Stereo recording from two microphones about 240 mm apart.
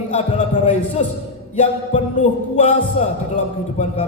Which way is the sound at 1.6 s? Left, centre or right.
Left.